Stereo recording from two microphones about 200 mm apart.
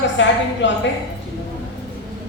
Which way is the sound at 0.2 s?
65° left (ahead or behind).